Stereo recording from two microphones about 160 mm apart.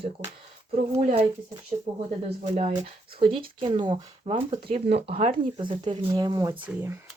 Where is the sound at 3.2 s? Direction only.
35° right (ahead or behind).